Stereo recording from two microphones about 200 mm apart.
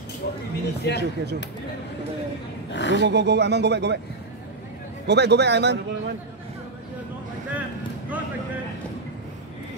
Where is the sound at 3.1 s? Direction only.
60° right (ahead or behind).